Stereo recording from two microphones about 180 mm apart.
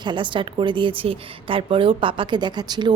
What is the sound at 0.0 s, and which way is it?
A woman's voice, 25° right (ahead or behind).